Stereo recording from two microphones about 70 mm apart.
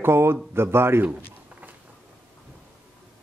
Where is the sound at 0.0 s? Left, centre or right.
Right.